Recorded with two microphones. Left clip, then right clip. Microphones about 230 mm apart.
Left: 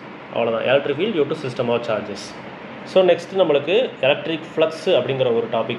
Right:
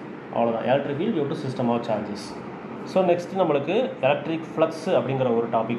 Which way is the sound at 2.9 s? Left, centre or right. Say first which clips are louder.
Left 6 dB; left.